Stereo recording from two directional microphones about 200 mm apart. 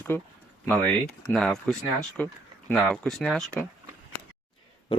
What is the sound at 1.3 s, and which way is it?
Speech, centre (ahead or behind).